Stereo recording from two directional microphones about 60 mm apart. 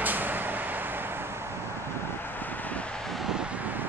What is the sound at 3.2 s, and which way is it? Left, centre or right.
Vehicle, centre.